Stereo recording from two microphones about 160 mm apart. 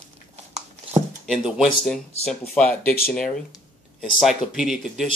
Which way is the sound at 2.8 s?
70° left (ahead or behind).